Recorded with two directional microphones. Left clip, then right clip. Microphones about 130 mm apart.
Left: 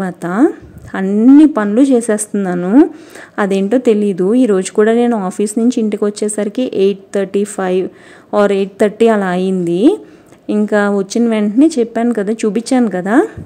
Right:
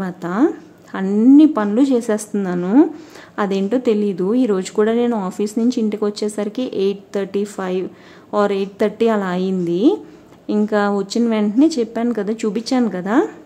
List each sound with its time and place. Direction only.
0.0 s speech: 35° left (ahead or behind)
1.0 s a woman's voice: 20° left (ahead or behind)